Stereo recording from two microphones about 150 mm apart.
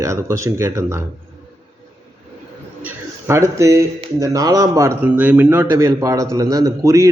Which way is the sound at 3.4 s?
20° right (ahead or behind).